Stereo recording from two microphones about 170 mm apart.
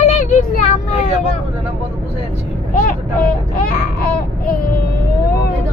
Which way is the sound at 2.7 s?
50° left (ahead or behind).